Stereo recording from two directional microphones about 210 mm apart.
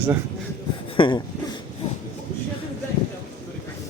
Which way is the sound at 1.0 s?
20° left (ahead or behind).